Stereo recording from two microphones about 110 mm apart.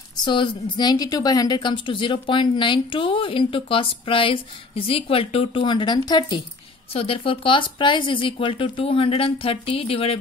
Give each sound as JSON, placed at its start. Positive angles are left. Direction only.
{"t": 0.1, "sound": "a woman's voice", "side_deg": 45}
{"t": 6.9, "sound": "speech", "side_deg": 60}